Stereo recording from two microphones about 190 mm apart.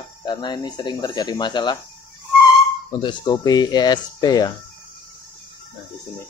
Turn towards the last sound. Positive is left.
turn(degrees=20)  # may be behind; listen again after turning